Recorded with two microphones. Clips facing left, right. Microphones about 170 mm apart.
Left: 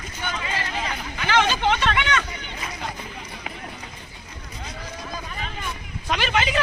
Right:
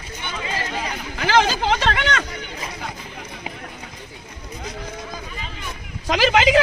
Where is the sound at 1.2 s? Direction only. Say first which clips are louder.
Right 4 dB; 35° right (ahead or behind).